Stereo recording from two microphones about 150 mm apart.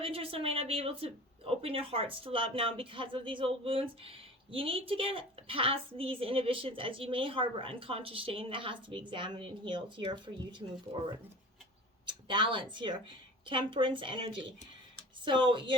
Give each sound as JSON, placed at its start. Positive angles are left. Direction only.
{"t": 0.0, "sound": "speech", "side_deg": -40}
{"t": 12.0, "sound": "speech", "side_deg": -30}